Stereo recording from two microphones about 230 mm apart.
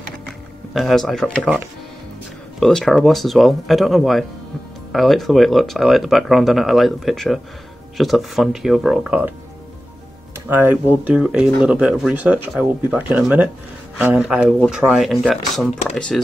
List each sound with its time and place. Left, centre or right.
0.7 s speech: centre
2.6 s speech: centre
10.5 s speech: centre